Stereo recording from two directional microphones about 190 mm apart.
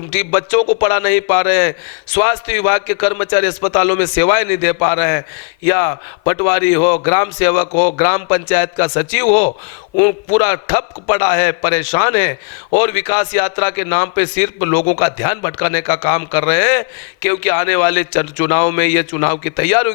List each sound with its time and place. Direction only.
0.1 s a man's voice: 15° left (ahead or behind)